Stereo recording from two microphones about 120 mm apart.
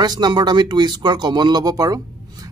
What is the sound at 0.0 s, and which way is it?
Speech, 35° right (ahead or behind).